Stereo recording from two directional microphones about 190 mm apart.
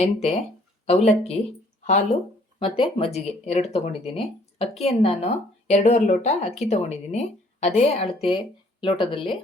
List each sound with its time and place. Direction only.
0.0 s speech: 30° left (ahead or behind)
2.6 s speech: 25° left (ahead or behind)